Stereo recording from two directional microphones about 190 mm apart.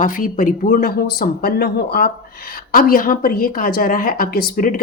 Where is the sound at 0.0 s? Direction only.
45° left (ahead or behind).